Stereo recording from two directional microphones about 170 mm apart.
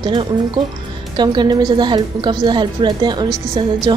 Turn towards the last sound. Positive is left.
turn(degrees=-25)  # may be behind; listen again after turning